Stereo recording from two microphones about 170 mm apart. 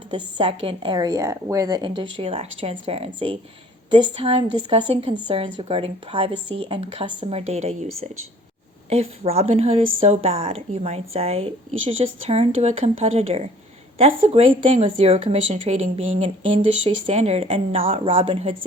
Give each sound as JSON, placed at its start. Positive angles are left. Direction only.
{"t": 0.1, "sound": "speech", "side_deg": -30}